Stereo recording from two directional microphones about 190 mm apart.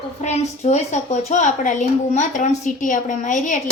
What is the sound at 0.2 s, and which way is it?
A woman's voice, 35° left (ahead or behind).